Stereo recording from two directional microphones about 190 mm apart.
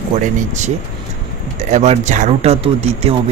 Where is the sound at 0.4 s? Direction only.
40° right (ahead or behind).